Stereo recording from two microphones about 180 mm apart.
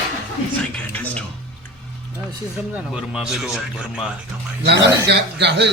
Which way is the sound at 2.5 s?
5° right (ahead or behind).